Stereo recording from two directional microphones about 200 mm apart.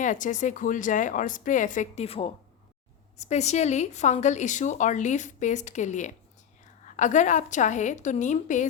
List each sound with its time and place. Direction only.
0.0 s speech: 40° left (ahead or behind)